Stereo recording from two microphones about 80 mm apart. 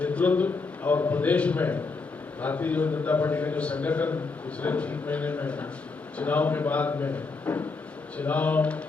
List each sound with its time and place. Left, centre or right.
0.0 s a man's voice: centre